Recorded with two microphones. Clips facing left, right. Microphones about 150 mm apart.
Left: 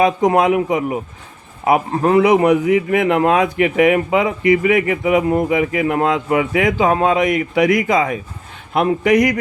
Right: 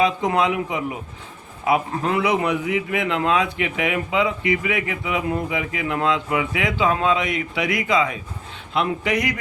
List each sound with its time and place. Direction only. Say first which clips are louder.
0.0 s a man's voice: left 6 dB; 45° left (ahead or behind)